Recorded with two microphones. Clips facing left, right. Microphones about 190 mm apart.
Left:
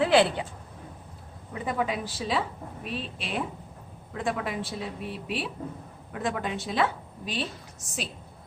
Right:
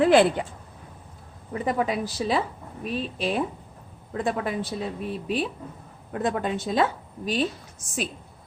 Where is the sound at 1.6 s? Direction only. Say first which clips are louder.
Right 4 dB; 40° right (ahead or behind).